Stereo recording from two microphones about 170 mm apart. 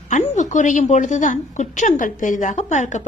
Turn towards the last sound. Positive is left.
turn(degrees=45)  # may be behind; listen again after turning